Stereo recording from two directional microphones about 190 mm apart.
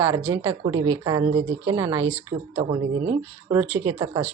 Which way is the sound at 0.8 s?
90° right.